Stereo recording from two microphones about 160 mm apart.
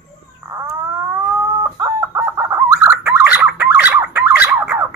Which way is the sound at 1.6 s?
20° right (ahead or behind).